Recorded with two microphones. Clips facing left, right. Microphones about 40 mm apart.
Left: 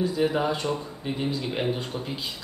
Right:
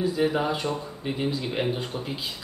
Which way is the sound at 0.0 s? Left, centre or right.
Centre.